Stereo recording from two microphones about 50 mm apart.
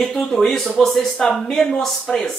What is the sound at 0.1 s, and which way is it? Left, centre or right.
Speech, centre.